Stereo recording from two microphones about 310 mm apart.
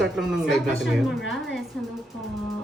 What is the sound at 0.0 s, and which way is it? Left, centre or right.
A man's voice, centre.